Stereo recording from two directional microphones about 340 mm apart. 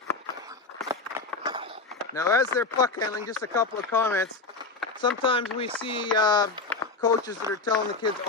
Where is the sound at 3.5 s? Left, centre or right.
Centre.